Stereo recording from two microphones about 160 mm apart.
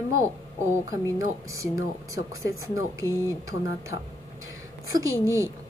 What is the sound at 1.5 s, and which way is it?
A woman's voice, 20° right (ahead or behind).